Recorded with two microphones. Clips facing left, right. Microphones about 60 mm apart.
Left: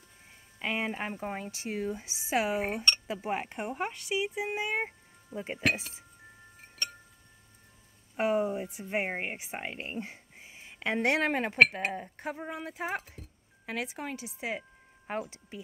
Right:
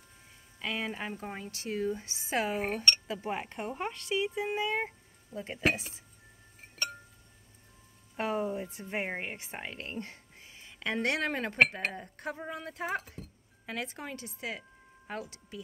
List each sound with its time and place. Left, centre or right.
0.6 s speech: left
3.8 s speech: centre
8.2 s speech: centre
15.0 s speech: left